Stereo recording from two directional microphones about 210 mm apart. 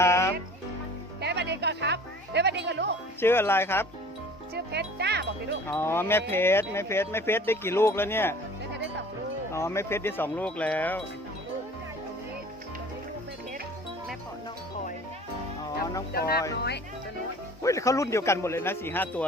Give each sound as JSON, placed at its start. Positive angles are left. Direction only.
{"t": 0.0, "sound": "music", "side_deg": 15}
{"t": 1.2, "sound": "music", "side_deg": -55}
{"t": 3.2, "sound": "speech", "side_deg": 10}
{"t": 4.5, "sound": "a child's voice", "side_deg": -50}
{"t": 5.6, "sound": "speech", "side_deg": 10}
{"t": 9.5, "sound": "speech", "side_deg": 15}
{"t": 16.1, "sound": "speech", "side_deg": 45}
{"t": 17.6, "sound": "speech", "side_deg": 15}